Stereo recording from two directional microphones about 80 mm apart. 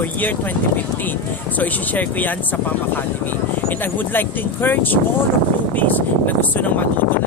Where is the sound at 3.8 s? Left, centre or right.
Left.